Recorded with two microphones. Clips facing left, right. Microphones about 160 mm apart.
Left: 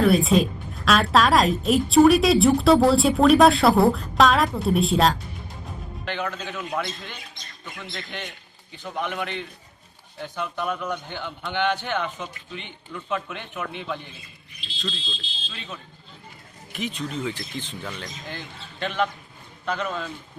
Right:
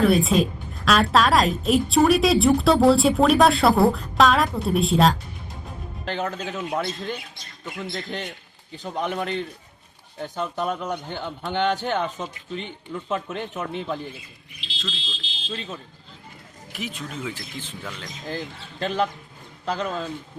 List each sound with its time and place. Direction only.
0.3 s speech: centre (ahead or behind)
6.1 s speech: 40° right (ahead or behind)
8.7 s speech: 40° right (ahead or behind)
14.6 s speech: 90° right
15.5 s speech: 40° right (ahead or behind)
16.7 s speech: 5° right (ahead or behind)
18.3 s speech: 35° right (ahead or behind)